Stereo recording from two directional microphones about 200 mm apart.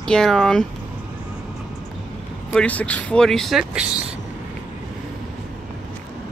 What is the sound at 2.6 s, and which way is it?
Speech, 5° left (ahead or behind).